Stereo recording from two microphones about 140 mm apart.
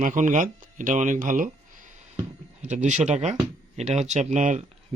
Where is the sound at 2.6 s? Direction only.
60° right (ahead or behind).